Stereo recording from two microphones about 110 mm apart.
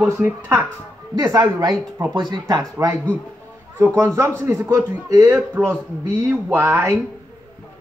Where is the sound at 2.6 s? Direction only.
25° right (ahead or behind).